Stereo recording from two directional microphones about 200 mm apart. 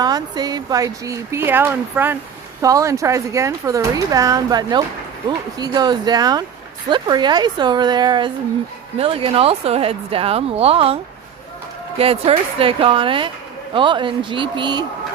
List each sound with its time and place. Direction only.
0.0 s speech: 20° right (ahead or behind)